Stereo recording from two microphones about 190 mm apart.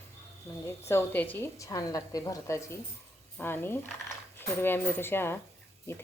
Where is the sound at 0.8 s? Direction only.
15° left (ahead or behind).